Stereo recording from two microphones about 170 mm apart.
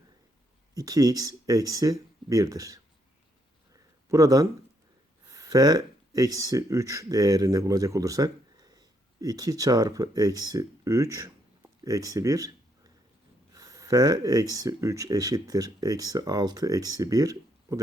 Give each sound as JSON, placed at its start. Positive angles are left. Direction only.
{"t": 0.7, "sound": "speech", "side_deg": -20}
{"t": 3.7, "sound": "a sound", "side_deg": -20}
{"t": 5.3, "sound": "speech", "side_deg": -20}